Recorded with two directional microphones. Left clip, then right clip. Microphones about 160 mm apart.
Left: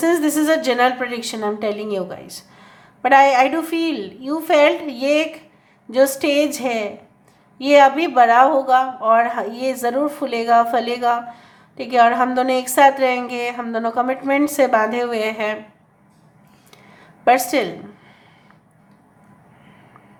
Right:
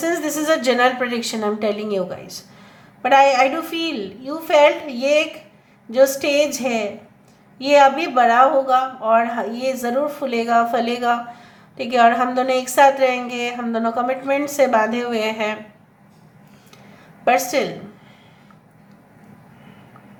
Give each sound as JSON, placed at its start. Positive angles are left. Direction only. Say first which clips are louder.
{"t": 0.0, "sound": "a woman's voice", "louder": "left 4 dB", "side_deg": 30}
{"t": 17.2, "sound": "a woman's voice", "louder": "left 2 dB", "side_deg": 25}